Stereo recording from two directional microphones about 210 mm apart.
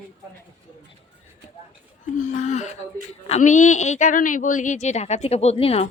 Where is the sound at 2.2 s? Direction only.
35° left (ahead or behind).